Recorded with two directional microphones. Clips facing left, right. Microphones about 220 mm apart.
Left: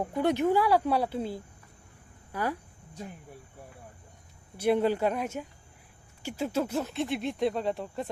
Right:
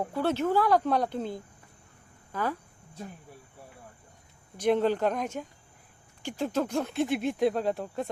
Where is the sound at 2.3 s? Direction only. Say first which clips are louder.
Even; 10° left (ahead or behind).